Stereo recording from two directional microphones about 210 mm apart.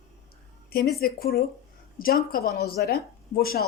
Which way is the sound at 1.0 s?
45° left (ahead or behind).